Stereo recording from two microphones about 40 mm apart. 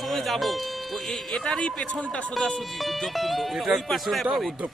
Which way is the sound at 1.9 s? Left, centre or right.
Left.